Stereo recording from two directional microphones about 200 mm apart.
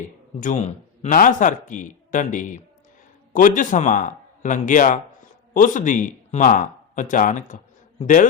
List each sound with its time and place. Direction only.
0.3 s a man's voice: 40° left (ahead or behind)